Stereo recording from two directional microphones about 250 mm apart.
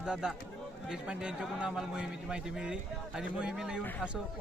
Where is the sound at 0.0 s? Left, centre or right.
Centre.